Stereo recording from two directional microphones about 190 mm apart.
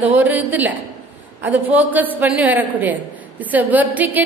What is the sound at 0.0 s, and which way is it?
A man's voice, 10° right (ahead or behind).